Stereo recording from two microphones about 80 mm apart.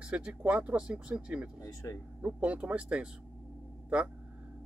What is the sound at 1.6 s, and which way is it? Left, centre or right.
Speech, left.